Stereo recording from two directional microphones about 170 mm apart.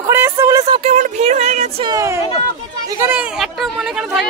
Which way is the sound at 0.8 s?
40° right (ahead or behind).